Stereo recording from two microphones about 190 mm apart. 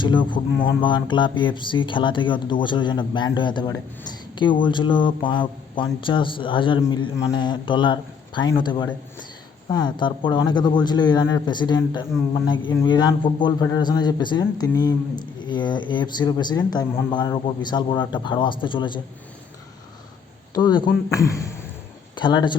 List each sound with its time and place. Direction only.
0.0 s speech: 25° left (ahead or behind)
20.5 s speech: 20° left (ahead or behind)